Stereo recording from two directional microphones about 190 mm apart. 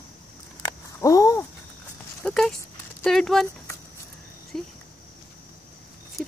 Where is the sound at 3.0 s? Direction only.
Centre (ahead or behind).